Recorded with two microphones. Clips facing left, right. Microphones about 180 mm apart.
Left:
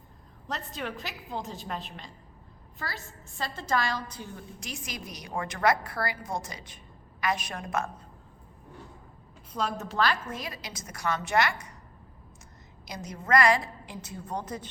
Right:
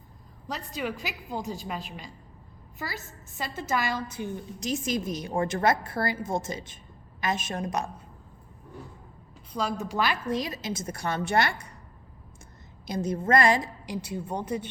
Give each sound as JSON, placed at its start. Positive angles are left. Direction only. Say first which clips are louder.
{"t": 0.4, "sound": "a woman's voice", "louder": "right 3 dB", "side_deg": -5}
{"t": 4.2, "sound": "a woman's voice", "louder": "right 8 dB", "side_deg": -20}
{"t": 9.5, "sound": "a woman's voice", "louder": "right 2 dB", "side_deg": 0}
{"t": 9.9, "sound": "a woman's voice", "louder": "right 1 dB", "side_deg": -20}
{"t": 12.9, "sound": "a woman's voice", "louder": "right 3 dB", "side_deg": -30}
{"t": 14.0, "sound": "a woman's voice", "louder": "right 1 dB", "side_deg": -10}